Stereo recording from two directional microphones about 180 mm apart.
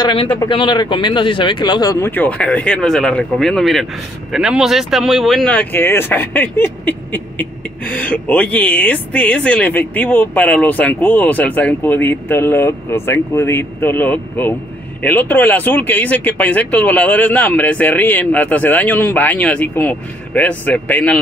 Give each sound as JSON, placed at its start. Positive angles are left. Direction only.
{"t": 0.0, "sound": "speech", "side_deg": 30}